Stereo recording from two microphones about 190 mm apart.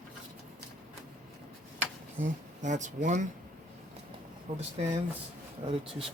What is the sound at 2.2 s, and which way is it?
Speech, 40° right (ahead or behind).